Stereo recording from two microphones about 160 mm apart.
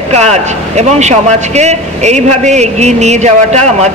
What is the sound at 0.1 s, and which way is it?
A man's voice, 45° right (ahead or behind).